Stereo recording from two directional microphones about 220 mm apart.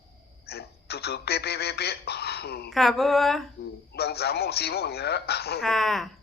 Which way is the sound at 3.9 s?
45° left (ahead or behind).